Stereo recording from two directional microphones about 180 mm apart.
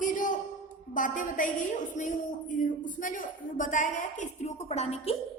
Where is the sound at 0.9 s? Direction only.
45° left (ahead or behind).